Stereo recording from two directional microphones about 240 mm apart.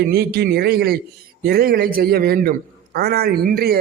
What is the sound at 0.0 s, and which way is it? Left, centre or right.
A man's voice, right.